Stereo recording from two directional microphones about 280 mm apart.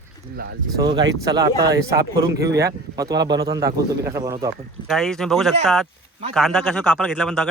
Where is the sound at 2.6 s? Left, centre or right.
Centre.